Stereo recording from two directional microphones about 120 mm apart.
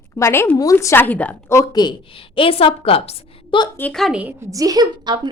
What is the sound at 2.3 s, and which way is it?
Speech, 50° left (ahead or behind).